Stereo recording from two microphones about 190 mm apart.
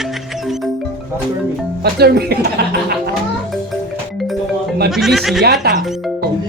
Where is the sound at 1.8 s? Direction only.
55° right (ahead or behind).